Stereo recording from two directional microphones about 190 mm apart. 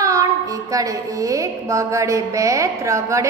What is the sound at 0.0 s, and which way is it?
Child singing, 15° right (ahead or behind).